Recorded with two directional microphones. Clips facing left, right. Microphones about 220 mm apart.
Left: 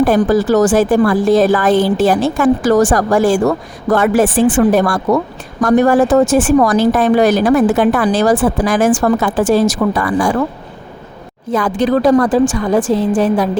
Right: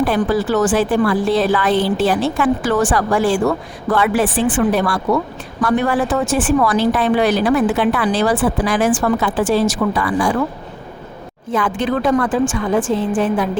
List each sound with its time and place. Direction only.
0.0 s a woman's voice: 45° left (ahead or behind)
11.5 s a woman's voice: 40° left (ahead or behind)